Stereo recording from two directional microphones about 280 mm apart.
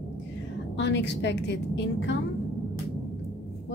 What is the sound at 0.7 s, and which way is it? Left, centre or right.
A woman's voice, left.